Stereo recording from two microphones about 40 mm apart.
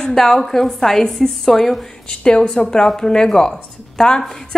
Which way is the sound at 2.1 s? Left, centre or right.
Left.